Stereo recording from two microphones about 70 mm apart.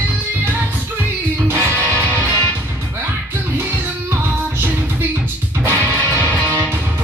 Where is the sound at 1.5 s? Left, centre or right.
Right.